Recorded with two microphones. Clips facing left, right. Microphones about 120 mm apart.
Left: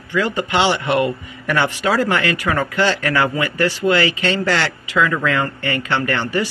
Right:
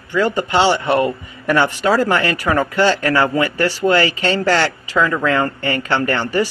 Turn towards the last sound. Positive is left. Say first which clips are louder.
# right 2 dB
turn(degrees=-40)  # may be behind; listen again after turning